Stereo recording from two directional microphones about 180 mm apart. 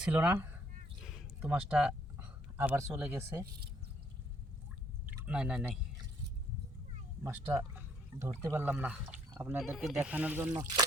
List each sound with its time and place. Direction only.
0.0 s speech: 10° right (ahead or behind)
1.0 s a sound: 5° right (ahead or behind)
5.0 s speech: 10° right (ahead or behind)
7.3 s speech: 10° right (ahead or behind)
9.6 s speech: centre (ahead or behind)
10.5 s speech: 20° right (ahead or behind)